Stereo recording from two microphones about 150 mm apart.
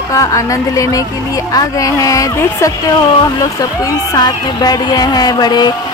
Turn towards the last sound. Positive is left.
turn(degrees=30)  # may be behind; listen again after turning